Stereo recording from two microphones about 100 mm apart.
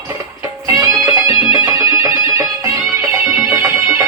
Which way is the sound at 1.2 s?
35° right (ahead or behind).